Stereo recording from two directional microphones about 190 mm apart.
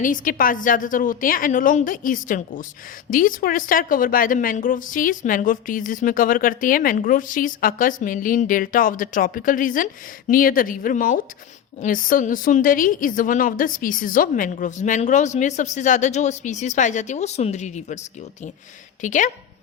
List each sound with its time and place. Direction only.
0.0 s a woman's voice: 45° left (ahead or behind)
19.0 s a woman's voice: 40° left (ahead or behind)